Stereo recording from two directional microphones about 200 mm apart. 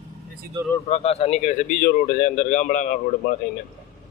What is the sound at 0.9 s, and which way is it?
Speech, 30° left (ahead or behind).